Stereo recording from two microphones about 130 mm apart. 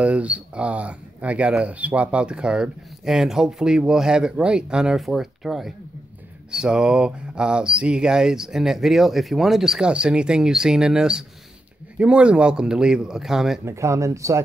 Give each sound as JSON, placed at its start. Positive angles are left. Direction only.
{"t": 0.0, "sound": "speech", "side_deg": -10}
{"t": 13.7, "sound": "speech", "side_deg": -25}